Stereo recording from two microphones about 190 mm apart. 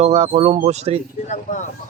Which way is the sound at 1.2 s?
40° left (ahead or behind).